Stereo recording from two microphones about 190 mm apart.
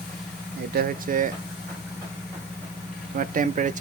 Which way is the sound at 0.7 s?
45° right (ahead or behind).